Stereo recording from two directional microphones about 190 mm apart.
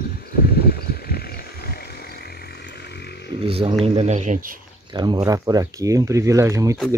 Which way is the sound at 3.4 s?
30° right (ahead or behind).